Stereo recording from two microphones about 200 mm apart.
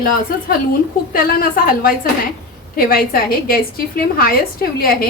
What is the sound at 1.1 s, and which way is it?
A woman's voice, 45° left (ahead or behind).